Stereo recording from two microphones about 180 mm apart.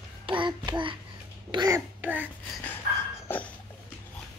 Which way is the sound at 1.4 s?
20° right (ahead or behind).